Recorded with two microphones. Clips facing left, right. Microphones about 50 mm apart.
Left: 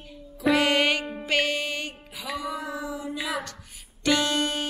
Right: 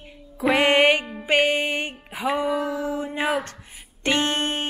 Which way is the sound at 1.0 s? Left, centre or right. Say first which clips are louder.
Left 1 dB; centre.